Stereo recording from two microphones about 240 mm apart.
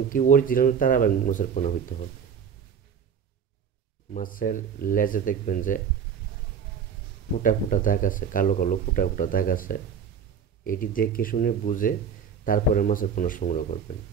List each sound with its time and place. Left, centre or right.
0.1 s speech: left
4.1 s speech: left
7.4 s speech: left